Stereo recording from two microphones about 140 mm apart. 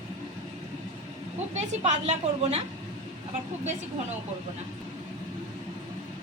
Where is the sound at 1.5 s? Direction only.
55° right (ahead or behind).